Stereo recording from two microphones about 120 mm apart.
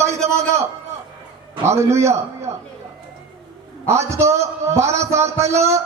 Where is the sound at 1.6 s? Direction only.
25° right (ahead or behind).